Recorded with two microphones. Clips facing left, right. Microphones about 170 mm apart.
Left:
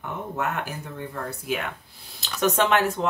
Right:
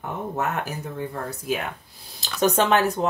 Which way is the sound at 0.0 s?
40° right (ahead or behind).